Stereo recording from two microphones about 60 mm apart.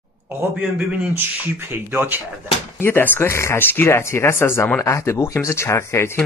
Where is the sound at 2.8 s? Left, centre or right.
Left.